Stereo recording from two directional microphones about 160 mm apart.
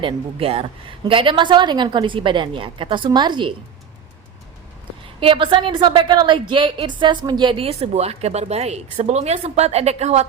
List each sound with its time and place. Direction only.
0.0 s a woman's voice: 35° right (ahead or behind)
5.2 s a woman's voice: 30° right (ahead or behind)